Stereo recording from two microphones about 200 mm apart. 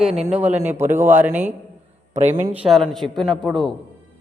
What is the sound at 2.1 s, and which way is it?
Speech, 35° right (ahead or behind).